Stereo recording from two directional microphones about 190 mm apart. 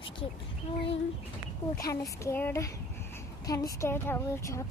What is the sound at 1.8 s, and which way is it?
A woman's voice, 15° left (ahead or behind).